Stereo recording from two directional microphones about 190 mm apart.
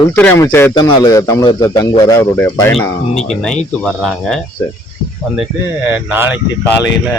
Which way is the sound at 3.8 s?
Centre (ahead or behind).